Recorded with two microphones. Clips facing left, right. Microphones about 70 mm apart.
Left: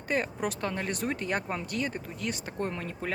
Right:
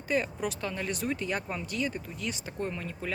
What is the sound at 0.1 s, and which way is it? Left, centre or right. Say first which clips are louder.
Speech: even; left.